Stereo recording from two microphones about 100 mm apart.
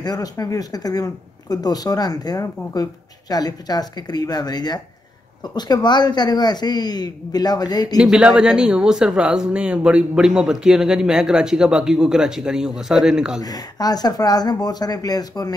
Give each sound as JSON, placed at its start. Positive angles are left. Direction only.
{"t": 0.0, "sound": "speech", "side_deg": 40}
{"t": 8.0, "sound": "speech", "side_deg": -10}
{"t": 13.4, "sound": "speech", "side_deg": 40}